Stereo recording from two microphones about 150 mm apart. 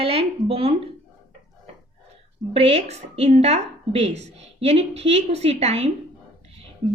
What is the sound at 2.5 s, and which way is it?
A woman's voice, 40° right (ahead or behind).